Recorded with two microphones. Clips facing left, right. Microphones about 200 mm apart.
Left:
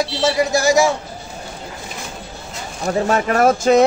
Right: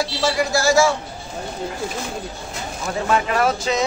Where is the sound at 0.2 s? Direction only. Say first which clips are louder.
Left 3 dB; 20° left (ahead or behind).